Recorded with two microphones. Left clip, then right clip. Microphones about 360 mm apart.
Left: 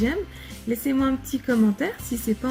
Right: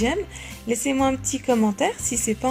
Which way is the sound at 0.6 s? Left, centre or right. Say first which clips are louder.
Right 3 dB; right.